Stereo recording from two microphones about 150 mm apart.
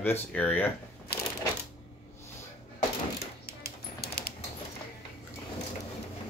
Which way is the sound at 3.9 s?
80° left.